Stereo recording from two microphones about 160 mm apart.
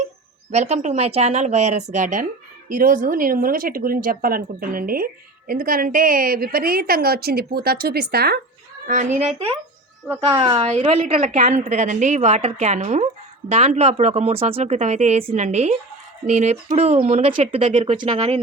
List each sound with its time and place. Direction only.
0.5 s a woman's voice: 45° right (ahead or behind); by 8.4 s 80° right
10.3 s a woman's voice: 20° right (ahead or behind)
10.6 s a woman's voice: 45° right (ahead or behind)
17.6 s a woman's voice: 50° right (ahead or behind)